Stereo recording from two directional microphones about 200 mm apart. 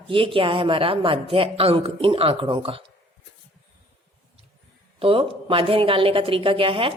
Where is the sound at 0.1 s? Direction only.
25° right (ahead or behind).